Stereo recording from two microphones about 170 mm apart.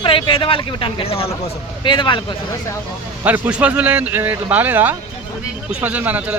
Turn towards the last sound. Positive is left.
turn(degrees=-10)  # may be behind; listen again after turning